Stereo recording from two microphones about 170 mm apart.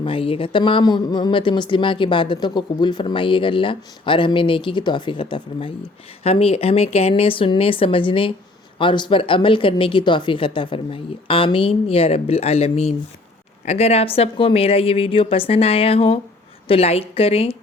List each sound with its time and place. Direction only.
0.0 s speech: 30° left (ahead or behind)